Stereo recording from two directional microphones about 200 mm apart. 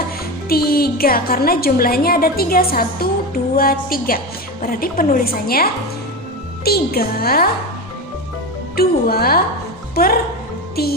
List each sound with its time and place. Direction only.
0.4 s a woman's voice: 50° left (ahead or behind)
6.7 s a woman's voice: 50° left (ahead or behind)
8.7 s a woman's voice: 50° left (ahead or behind)